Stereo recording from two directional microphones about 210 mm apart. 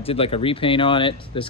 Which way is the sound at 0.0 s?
25° left (ahead or behind).